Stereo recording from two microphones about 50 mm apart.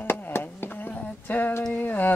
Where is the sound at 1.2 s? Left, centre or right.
Left.